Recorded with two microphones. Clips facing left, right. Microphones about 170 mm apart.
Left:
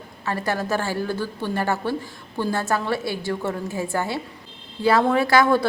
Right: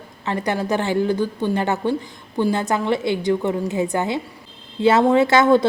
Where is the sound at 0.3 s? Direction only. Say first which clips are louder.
Right 3 dB; 20° right (ahead or behind).